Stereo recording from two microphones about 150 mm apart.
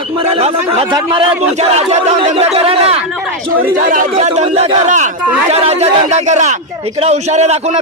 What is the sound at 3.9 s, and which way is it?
A man's voice, 60° right (ahead or behind).